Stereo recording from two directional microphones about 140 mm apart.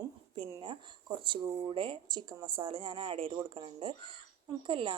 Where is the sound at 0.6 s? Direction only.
35° right (ahead or behind).